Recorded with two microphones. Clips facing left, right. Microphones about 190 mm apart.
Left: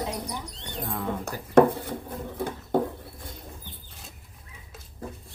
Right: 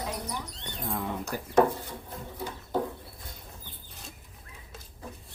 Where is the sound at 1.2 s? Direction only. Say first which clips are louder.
Left 5 dB; 60° left (ahead or behind).